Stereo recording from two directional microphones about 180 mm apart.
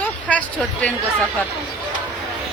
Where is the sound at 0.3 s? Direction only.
10° left (ahead or behind).